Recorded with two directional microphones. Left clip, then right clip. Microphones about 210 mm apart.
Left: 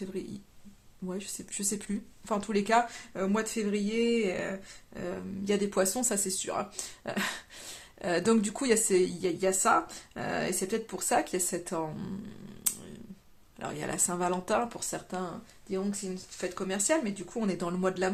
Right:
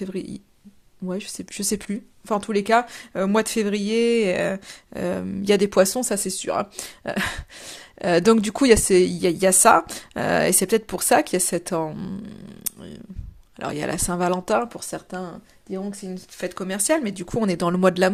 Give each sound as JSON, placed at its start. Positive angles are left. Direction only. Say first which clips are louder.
{"t": 0.0, "sound": "speech", "louder": "right 7 dB", "side_deg": -35}
{"t": 13.6, "sound": "speech", "louder": "right 8 dB", "side_deg": -35}
{"t": 16.4, "sound": "speech", "louder": "right 6 dB", "side_deg": -40}